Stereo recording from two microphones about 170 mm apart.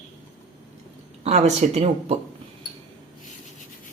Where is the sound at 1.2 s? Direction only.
40° right (ahead or behind).